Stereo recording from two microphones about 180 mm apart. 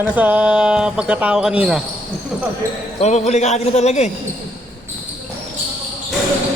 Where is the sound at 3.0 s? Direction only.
40° left (ahead or behind).